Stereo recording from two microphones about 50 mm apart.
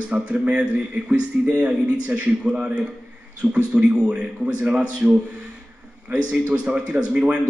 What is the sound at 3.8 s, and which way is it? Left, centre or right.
A man's voice, centre.